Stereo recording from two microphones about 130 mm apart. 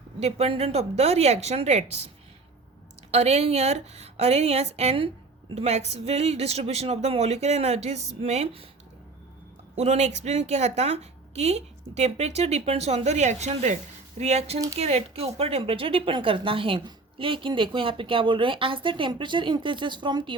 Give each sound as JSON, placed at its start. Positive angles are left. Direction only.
{"t": 0.2, "sound": "speech", "side_deg": -55}
{"t": 3.1, "sound": "a woman's voice", "side_deg": -55}
{"t": 9.7, "sound": "a woman's voice", "side_deg": -55}